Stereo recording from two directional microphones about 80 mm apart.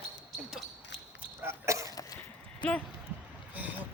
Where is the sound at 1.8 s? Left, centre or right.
Left.